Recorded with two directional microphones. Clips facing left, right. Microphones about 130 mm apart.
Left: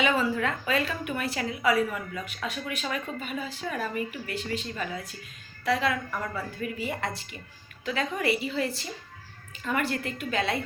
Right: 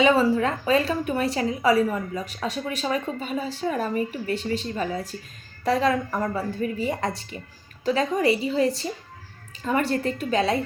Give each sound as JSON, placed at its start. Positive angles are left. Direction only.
{"t": 0.0, "sound": "a woman's voice", "side_deg": -35}